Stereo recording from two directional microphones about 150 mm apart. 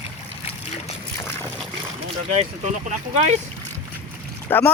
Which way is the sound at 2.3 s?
50° right (ahead or behind).